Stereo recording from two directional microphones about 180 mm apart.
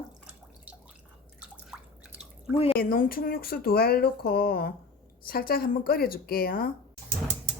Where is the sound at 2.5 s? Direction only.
30° left (ahead or behind).